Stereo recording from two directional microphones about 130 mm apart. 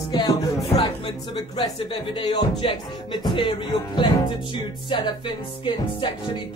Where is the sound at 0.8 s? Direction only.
35° left (ahead or behind).